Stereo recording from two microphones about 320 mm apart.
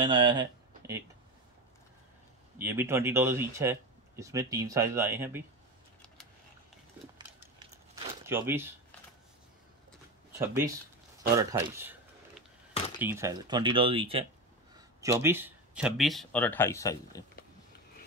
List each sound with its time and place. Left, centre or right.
0.0 s speech: centre
2.6 s speech: centre
7.2 s crumpling: centre
10.4 s speech: centre
11.2 s a sound: centre
13.0 s speech: centre